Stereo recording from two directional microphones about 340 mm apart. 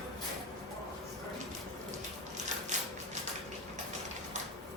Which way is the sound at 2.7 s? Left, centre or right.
Right.